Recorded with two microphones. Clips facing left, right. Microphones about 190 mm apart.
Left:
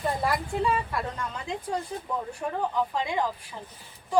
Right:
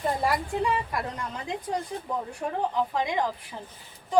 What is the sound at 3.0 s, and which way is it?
Speech, 15° right (ahead or behind).